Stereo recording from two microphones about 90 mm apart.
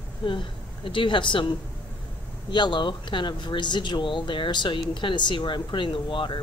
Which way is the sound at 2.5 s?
60° left (ahead or behind).